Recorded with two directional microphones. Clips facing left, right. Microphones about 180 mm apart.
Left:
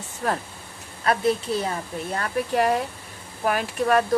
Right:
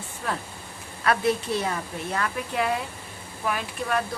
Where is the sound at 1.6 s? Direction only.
35° left (ahead or behind).